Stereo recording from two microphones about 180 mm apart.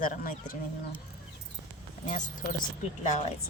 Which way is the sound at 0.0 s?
50° left (ahead or behind).